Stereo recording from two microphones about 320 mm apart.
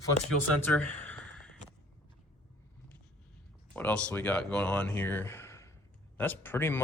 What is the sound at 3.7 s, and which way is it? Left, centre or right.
Speech, centre.